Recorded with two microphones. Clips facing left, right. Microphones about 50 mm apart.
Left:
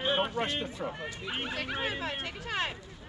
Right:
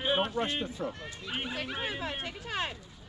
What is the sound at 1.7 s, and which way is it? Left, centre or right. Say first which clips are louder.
Speech: left 2 dB; left.